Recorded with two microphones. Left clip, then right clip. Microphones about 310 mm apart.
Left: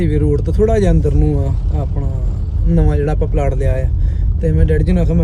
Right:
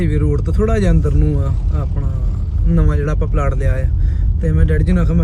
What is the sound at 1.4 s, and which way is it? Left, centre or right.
Speech, left.